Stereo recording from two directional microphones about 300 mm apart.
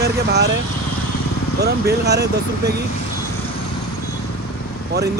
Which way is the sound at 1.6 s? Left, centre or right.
Right.